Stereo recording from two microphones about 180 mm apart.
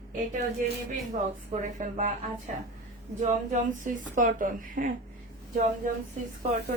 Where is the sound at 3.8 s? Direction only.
45° right (ahead or behind).